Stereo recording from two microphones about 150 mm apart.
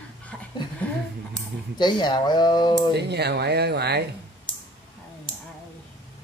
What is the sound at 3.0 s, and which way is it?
Speech, 90° right.